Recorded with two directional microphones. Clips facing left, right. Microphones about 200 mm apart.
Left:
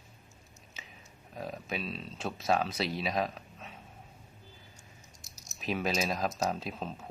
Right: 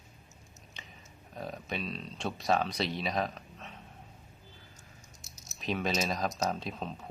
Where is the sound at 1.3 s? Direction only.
Centre (ahead or behind).